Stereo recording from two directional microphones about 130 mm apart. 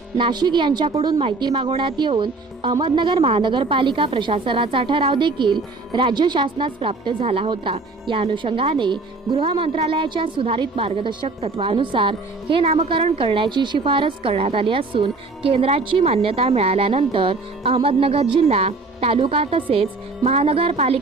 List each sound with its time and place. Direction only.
0.2 s a woman's voice: 35° right (ahead or behind); by 21.0 s 50° right (ahead or behind)